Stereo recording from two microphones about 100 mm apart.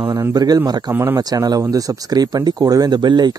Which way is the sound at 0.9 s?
25° right (ahead or behind).